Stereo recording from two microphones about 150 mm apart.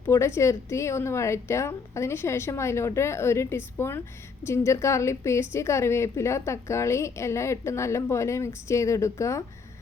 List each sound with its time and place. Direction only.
0.1 s a woman's voice: 15° left (ahead or behind)